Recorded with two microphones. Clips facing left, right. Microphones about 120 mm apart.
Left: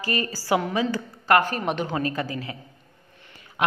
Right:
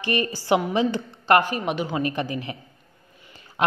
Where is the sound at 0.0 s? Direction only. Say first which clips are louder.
Right 3 dB; 20° right (ahead or behind).